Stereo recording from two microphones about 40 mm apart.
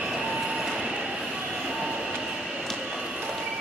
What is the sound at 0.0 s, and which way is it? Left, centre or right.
Train, centre.